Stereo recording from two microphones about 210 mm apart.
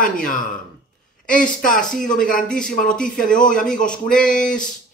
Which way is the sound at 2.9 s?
5° left (ahead or behind).